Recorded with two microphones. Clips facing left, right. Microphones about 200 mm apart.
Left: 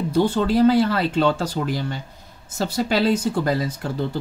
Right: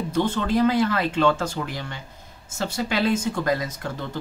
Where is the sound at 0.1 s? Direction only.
35° left (ahead or behind).